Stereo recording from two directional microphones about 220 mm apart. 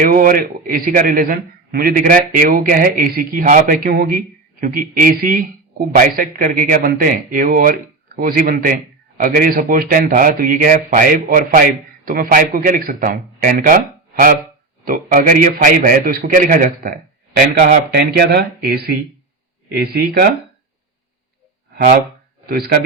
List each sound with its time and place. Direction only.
0.0 s a man's voice: 40° right (ahead or behind)
22.4 s speech: 45° right (ahead or behind)